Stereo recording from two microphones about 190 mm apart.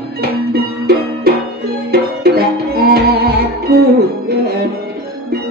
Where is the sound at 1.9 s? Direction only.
55° right (ahead or behind).